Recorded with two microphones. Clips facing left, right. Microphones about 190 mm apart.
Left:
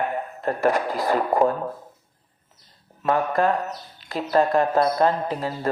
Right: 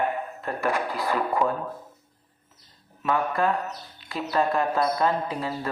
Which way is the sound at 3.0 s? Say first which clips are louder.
Left 3 dB; 40° left (ahead or behind).